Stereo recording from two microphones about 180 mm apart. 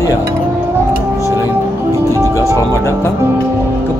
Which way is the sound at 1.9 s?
15° right (ahead or behind).